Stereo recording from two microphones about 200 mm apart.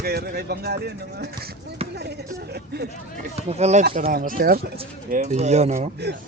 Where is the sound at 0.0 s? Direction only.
50° right (ahead or behind).